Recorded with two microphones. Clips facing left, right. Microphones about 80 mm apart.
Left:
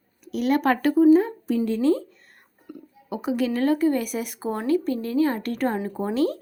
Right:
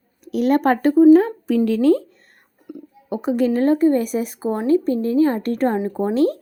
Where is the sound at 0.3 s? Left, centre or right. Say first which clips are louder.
Right 4 dB; right.